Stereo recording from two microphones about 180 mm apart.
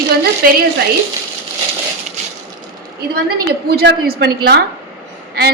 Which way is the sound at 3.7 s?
60° right (ahead or behind).